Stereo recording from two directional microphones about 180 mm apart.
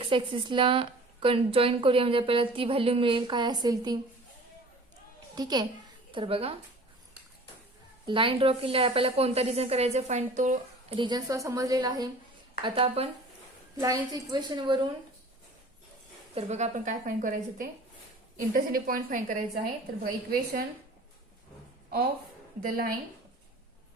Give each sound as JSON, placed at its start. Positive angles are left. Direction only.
{"t": 0.0, "sound": "a woman's voice", "side_deg": -30}
{"t": 5.3, "sound": "a child's voice", "side_deg": -20}
{"t": 8.0, "sound": "a woman's voice", "side_deg": -30}
{"t": 10.9, "sound": "a woman's voice", "side_deg": -25}
{"t": 13.7, "sound": "a woman's voice", "side_deg": -20}
{"t": 16.3, "sound": "a woman's voice", "side_deg": -40}
{"t": 22.6, "sound": "a woman's voice", "side_deg": -55}